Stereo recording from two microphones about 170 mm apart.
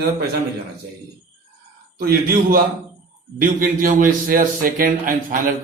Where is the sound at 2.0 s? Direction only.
60° right (ahead or behind).